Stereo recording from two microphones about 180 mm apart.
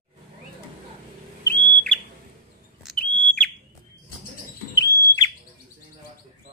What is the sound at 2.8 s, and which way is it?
Whistle, centre (ahead or behind).